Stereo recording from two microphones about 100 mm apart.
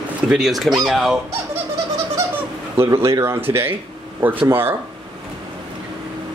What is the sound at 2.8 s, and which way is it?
Speech, 30° right (ahead or behind).